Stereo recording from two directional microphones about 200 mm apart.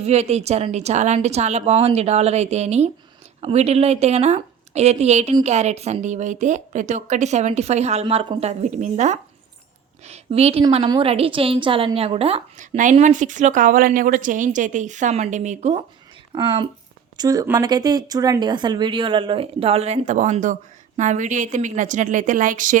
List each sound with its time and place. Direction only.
0.0 s a woman's voice: 30° right (ahead or behind)
16.3 s a woman's voice: 25° right (ahead or behind)